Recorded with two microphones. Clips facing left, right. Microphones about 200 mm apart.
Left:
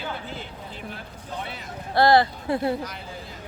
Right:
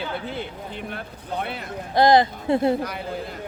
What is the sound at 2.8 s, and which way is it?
Speech, 60° right (ahead or behind).